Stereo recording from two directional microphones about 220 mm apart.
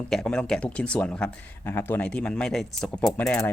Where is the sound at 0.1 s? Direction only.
5° left (ahead or behind).